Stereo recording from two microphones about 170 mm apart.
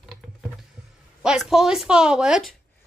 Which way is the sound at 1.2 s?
5° right (ahead or behind).